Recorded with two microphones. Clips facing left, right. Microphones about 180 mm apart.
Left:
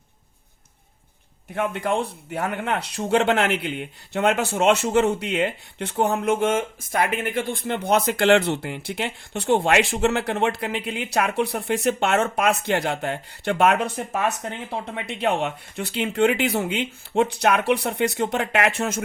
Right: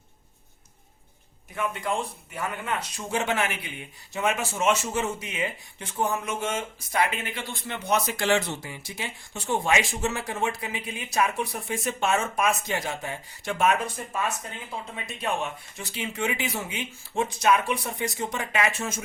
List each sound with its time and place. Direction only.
1.5 s speech: 60° left (ahead or behind)